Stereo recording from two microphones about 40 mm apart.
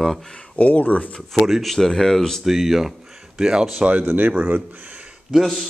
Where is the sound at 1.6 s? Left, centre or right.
Centre.